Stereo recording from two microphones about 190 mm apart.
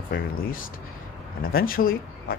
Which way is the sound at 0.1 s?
50° left (ahead or behind).